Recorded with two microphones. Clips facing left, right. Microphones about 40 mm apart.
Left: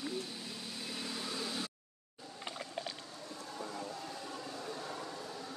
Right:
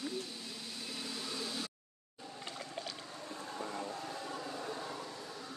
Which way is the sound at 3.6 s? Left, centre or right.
Right.